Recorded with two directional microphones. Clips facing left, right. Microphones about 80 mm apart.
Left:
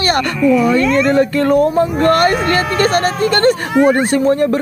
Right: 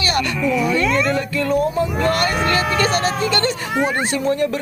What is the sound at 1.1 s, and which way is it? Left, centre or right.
Speech, left.